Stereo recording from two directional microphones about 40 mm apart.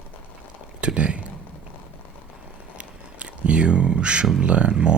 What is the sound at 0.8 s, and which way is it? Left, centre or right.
Speech, right.